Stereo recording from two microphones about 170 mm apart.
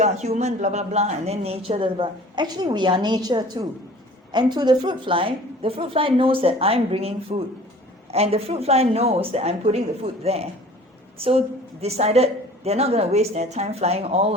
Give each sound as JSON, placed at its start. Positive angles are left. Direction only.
{"t": 0.0, "sound": "a man's voice", "side_deg": -40}